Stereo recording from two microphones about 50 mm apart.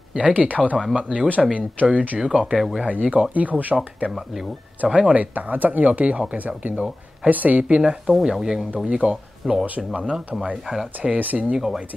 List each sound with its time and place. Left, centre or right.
0.1 s speech: right
2.3 s speech: centre
2.8 s speech: right
4.1 s speech: centre
5.1 s speech: right
7.6 s speech: centre
8.1 s speech: centre
8.7 s speech: right
11.0 s speech: right
11.5 s speech: centre